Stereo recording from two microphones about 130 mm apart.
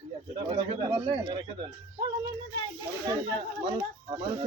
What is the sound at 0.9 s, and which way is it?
Speech, 35° right (ahead or behind).